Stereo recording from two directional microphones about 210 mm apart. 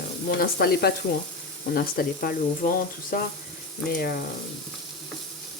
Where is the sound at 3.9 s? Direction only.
45° left (ahead or behind).